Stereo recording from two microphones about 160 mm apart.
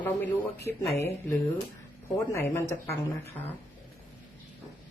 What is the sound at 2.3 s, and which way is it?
Speech, 15° left (ahead or behind).